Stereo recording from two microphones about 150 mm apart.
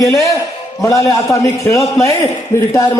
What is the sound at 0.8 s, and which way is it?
A man's voice, 20° left (ahead or behind).